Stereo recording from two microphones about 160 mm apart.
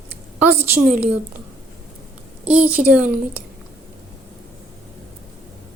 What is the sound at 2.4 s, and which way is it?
Speech, 10° right (ahead or behind).